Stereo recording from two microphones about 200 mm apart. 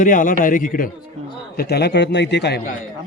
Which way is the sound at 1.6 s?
55° left (ahead or behind).